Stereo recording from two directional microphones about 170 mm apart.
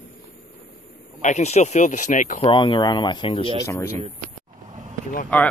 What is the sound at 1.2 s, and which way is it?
Speech, 45° left (ahead or behind).